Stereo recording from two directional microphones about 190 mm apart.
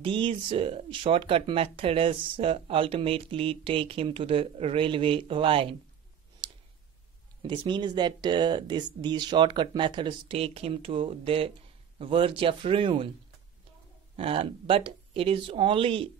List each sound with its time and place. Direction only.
0.0 s speech: 25° right (ahead or behind)
7.4 s speech: 25° right (ahead or behind)
14.1 s speech: 30° right (ahead or behind)